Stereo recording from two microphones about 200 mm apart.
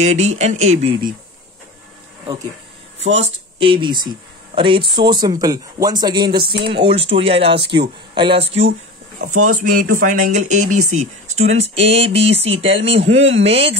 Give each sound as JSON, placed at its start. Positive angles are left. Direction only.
{"t": 0.0, "sound": "speech", "side_deg": -35}
{"t": 3.0, "sound": "speech", "side_deg": -35}
{"t": 9.3, "sound": "speech", "side_deg": -90}
{"t": 9.6, "sound": "speech", "side_deg": -40}
{"t": 11.0, "sound": "speech", "side_deg": -90}
{"t": 11.4, "sound": "speech", "side_deg": -30}